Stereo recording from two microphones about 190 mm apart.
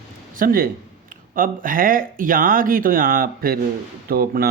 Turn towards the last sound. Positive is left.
turn(degrees=-50)  # may be behind; listen again after turning